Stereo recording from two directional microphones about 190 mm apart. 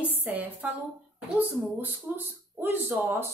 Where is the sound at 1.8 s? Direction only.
10° right (ahead or behind).